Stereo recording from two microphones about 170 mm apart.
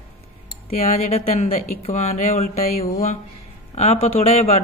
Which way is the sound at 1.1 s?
40° left (ahead or behind).